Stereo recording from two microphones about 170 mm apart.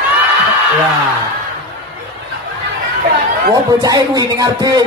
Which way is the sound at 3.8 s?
20° right (ahead or behind).